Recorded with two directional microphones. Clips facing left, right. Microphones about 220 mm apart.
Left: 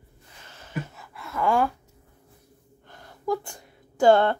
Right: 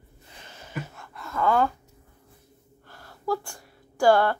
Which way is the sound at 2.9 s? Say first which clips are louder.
Left 1 dB; 20° left (ahead or behind).